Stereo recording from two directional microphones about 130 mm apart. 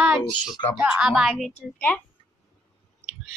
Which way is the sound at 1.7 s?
15° left (ahead or behind).